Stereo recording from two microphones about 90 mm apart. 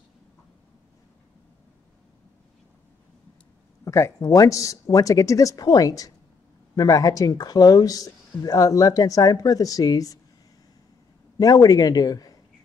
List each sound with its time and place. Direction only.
3.8 s speech: 35° left (ahead or behind)
11.3 s a man's voice: 45° left (ahead or behind)